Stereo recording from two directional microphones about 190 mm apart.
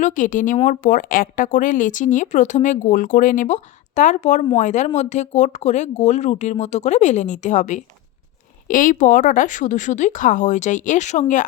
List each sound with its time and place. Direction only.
0.0 s a woman's voice: 45° left (ahead or behind)